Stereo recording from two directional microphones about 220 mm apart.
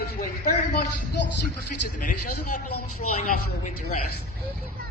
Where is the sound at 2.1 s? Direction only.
90° left.